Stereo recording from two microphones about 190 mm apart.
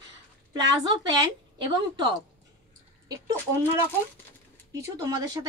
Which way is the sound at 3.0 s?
20° right (ahead or behind).